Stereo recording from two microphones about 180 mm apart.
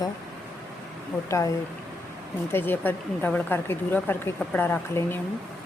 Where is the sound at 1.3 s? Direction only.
20° left (ahead or behind).